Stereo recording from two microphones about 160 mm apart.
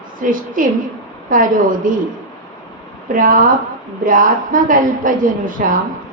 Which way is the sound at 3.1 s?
60° right (ahead or behind).